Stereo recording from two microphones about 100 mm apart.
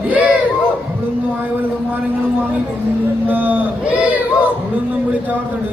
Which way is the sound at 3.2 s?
20° right (ahead or behind).